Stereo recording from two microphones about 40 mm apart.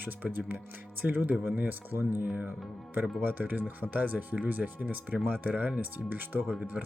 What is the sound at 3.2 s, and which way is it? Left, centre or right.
Speech, right.